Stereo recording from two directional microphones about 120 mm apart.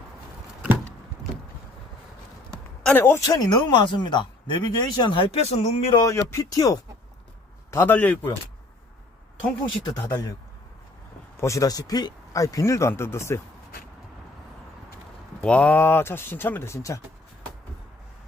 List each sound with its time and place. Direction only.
2.9 s speech: 20° left (ahead or behind)
3.2 s speech: 35° left (ahead or behind); by 5.9 s 65° left (ahead or behind)
6.0 s a man's voice: 25° left (ahead or behind)
9.8 s speech: 35° left (ahead or behind)
11.3 s speech: 25° left (ahead or behind)
15.4 s speech: 10° left (ahead or behind)